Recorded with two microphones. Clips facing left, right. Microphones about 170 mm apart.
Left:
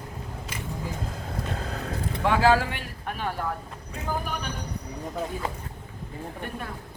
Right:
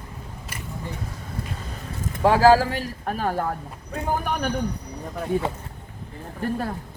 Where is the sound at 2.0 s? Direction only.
35° right (ahead or behind).